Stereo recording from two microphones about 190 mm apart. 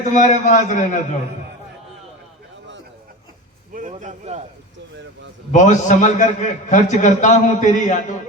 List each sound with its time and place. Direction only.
0.1 s a man's voice: 40° left (ahead or behind)
3.8 s a man's voice: 40° right (ahead or behind)
5.5 s a man's voice: 40° left (ahead or behind)